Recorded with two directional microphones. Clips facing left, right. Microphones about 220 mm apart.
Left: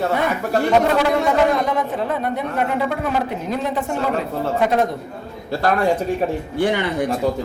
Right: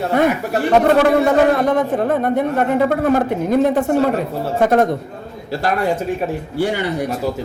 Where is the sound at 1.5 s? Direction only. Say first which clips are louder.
Right 5 dB; 50° right (ahead or behind).